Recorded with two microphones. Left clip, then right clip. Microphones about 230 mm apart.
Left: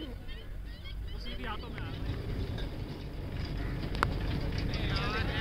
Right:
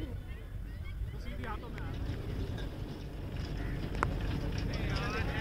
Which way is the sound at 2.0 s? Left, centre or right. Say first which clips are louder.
Left 2 dB; centre.